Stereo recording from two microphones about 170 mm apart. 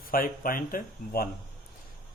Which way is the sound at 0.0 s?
55° left (ahead or behind).